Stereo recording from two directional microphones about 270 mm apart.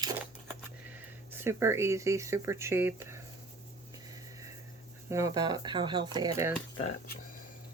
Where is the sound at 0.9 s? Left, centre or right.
Centre.